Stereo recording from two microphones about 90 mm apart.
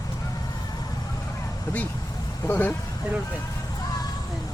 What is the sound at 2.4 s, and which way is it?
Speech, 20° left (ahead or behind).